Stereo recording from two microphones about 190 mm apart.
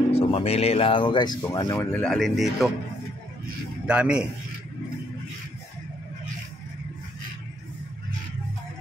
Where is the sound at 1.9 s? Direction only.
5° left (ahead or behind).